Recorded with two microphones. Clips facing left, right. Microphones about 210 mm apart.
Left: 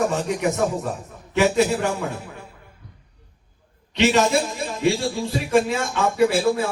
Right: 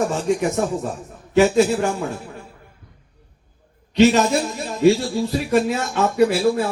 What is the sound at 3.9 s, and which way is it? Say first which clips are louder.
Speech: right 5 dB; 40° right (ahead or behind).